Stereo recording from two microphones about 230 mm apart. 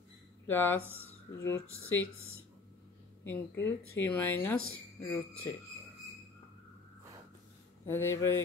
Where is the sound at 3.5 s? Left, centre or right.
Left.